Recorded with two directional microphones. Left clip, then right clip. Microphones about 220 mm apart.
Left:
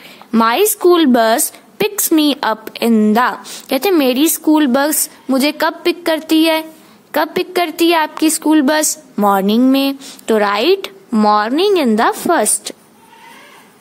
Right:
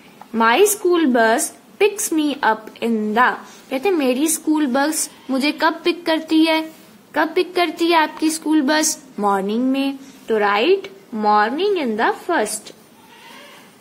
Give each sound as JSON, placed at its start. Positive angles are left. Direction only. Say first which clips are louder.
{"t": 0.3, "sound": "a woman's voice", "louder": "left 2 dB", "side_deg": 50}